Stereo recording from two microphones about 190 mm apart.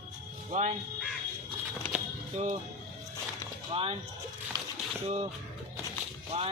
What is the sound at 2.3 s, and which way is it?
Speech, 40° right (ahead or behind).